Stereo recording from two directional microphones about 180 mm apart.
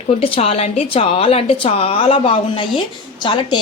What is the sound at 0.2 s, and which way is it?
A woman's voice, 35° left (ahead or behind).